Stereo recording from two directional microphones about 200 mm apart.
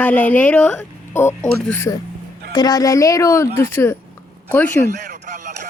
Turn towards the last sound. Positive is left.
turn(degrees=-40)  # may be behind; listen again after turning